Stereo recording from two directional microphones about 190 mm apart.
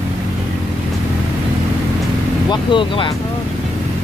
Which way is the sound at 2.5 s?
25° left (ahead or behind).